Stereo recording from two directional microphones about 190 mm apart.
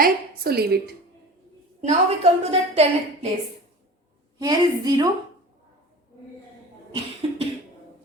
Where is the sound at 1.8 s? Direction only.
35° right (ahead or behind).